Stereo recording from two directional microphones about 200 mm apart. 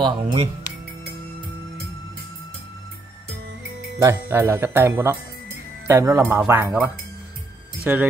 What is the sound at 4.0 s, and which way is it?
Speech, 15° right (ahead or behind).